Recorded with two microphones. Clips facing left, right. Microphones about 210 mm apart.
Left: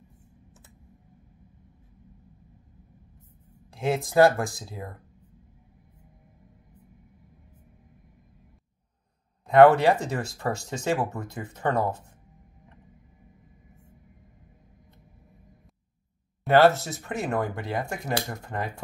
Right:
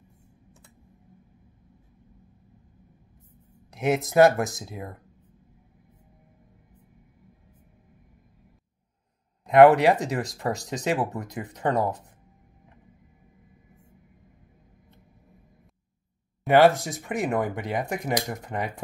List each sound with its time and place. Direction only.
3.7 s speech: 20° right (ahead or behind)
9.5 s speech: 15° right (ahead or behind)
16.4 s speech: 15° right (ahead or behind)